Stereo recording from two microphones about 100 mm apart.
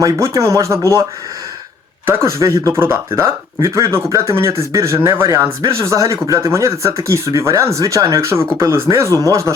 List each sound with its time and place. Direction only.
0.0 s speech: 30° right (ahead or behind)
2.0 s speech: 25° right (ahead or behind)